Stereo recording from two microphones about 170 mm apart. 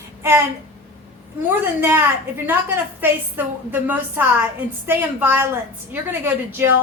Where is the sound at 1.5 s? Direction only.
15° right (ahead or behind).